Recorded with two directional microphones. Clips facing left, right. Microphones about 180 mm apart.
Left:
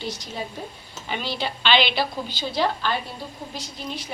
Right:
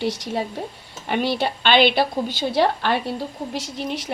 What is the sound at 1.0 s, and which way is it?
A woman's voice, 60° right (ahead or behind).